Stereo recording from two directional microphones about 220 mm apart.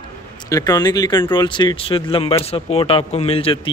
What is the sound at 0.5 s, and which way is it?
Speech, 15° left (ahead or behind).